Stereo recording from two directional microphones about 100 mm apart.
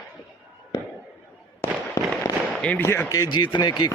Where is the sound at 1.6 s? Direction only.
30° left (ahead or behind).